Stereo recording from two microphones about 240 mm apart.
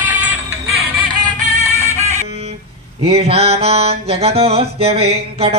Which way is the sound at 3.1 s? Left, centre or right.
Right.